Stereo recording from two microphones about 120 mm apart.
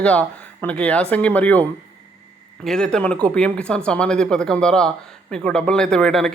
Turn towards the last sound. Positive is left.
turn(degrees=5)  # may be behind; listen again after turning